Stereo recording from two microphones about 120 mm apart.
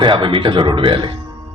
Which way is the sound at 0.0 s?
45° right (ahead or behind).